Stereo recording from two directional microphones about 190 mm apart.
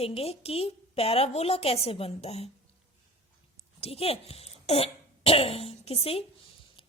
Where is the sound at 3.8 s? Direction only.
30° left (ahead or behind).